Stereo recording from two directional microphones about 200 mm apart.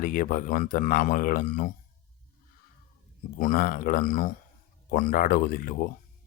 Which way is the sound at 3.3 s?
45° left (ahead or behind).